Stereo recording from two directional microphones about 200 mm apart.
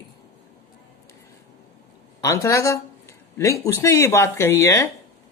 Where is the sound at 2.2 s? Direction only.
15° left (ahead or behind).